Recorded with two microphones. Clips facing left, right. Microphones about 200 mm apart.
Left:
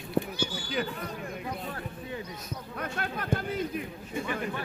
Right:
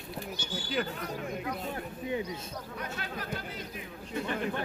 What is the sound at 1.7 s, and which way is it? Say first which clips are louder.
Speech: right 3 dB; 20° right (ahead or behind).